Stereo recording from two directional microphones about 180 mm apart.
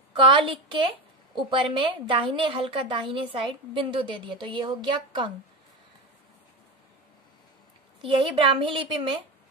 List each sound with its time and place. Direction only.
0.1 s a woman's voice: 25° right (ahead or behind)
8.0 s a woman's voice: 30° right (ahead or behind)